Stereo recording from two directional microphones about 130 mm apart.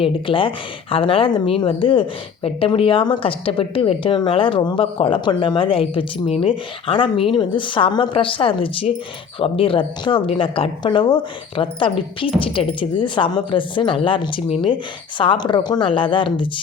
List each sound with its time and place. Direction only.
0.0 s a woman's voice: 40° left (ahead or behind)